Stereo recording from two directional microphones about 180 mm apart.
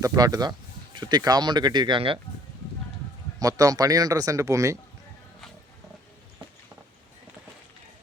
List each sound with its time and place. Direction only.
0.0 s speech: 20° right (ahead or behind)
3.4 s speech: 20° right (ahead or behind)